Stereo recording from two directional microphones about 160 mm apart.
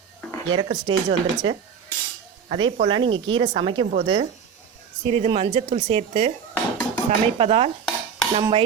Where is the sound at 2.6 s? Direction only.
30° right (ahead or behind).